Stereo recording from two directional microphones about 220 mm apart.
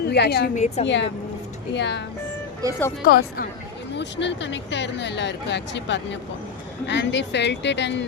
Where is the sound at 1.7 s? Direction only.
50° left (ahead or behind).